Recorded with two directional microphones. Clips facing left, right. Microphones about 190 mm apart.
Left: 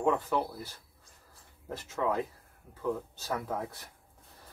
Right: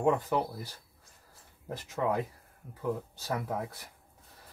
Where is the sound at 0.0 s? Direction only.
20° right (ahead or behind).